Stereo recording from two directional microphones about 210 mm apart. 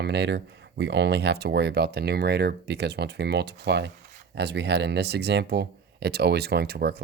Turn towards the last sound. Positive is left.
turn(degrees=-50)  # may be behind; listen again after turning